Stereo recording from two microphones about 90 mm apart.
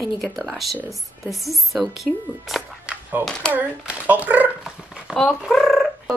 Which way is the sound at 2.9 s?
10° right (ahead or behind).